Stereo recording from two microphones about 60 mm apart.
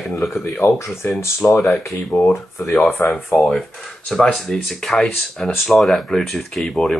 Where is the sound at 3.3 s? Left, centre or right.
Centre.